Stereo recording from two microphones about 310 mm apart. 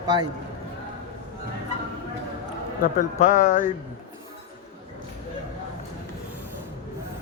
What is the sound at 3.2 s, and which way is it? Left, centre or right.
Speech, left.